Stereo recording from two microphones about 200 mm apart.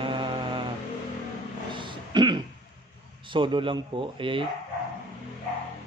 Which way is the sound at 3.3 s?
25° right (ahead or behind).